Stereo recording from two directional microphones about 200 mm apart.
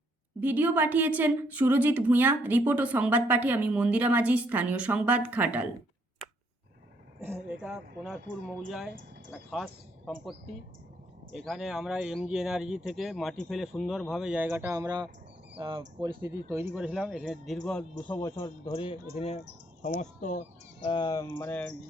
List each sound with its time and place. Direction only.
0.3 s a woman's voice: 10° right (ahead or behind)
7.2 s speech: 10° right (ahead or behind)
11.3 s speech: centre (ahead or behind); by 15.8 s 20° right (ahead or behind)
16.5 s speech: 10° right (ahead or behind); by 18.3 s 10° left (ahead or behind)
18.3 s speech: 20° left (ahead or behind)
19.8 s speech: 35° left (ahead or behind)
20.8 s speech: 25° left (ahead or behind)
21.3 s speech: 10° left (ahead or behind)